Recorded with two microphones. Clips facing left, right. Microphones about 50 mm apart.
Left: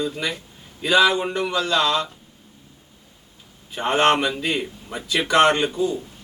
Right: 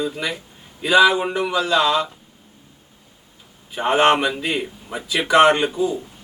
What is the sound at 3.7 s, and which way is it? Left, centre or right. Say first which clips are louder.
A man's voice: right 2 dB; centre.